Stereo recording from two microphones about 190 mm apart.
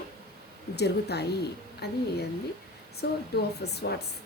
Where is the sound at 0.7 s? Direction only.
60° left (ahead or behind).